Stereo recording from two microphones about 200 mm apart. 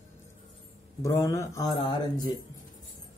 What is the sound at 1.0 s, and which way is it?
A man's voice, 15° left (ahead or behind).